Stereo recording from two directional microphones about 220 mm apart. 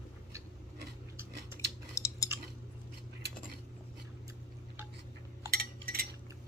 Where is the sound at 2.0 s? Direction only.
15° left (ahead or behind).